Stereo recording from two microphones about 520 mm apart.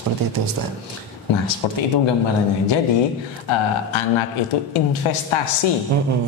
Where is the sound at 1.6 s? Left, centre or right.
Left.